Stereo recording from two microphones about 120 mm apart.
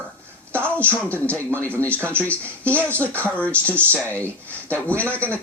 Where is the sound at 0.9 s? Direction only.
15° left (ahead or behind).